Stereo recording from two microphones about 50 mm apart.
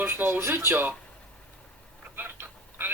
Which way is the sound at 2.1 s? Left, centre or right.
Right.